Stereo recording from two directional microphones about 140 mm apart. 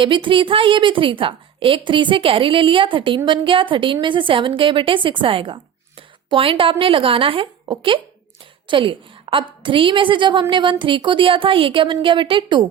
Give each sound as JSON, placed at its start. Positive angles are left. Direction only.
{"t": 0.0, "sound": "a woman's voice", "side_deg": -35}